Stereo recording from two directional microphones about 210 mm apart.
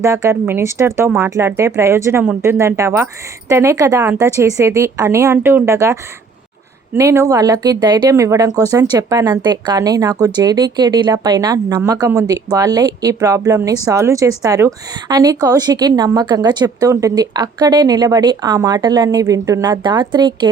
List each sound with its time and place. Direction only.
0.0 s speech: 15° right (ahead or behind)